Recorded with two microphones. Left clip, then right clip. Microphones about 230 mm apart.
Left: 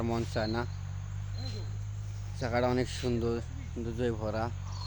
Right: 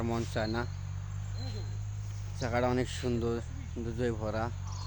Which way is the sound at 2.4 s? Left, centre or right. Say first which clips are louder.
Left 1 dB; centre.